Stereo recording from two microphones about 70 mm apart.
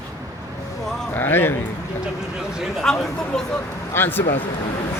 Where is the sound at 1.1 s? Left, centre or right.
Left.